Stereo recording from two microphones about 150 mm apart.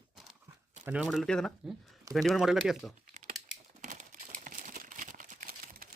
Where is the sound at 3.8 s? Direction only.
55° right (ahead or behind).